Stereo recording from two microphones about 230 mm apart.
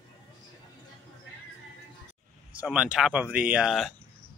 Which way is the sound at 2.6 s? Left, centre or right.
Centre.